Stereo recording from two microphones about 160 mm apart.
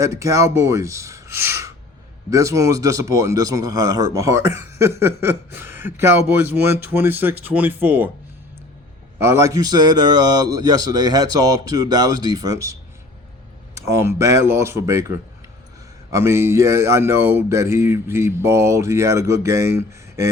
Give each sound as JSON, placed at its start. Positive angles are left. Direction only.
{"t": 0.0, "sound": "a man's voice", "side_deg": -20}
{"t": 9.1, "sound": "a man's voice", "side_deg": -15}
{"t": 13.7, "sound": "a man's voice", "side_deg": -20}